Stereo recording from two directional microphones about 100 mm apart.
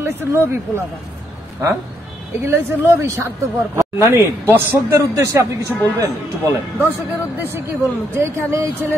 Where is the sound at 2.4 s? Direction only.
25° right (ahead or behind).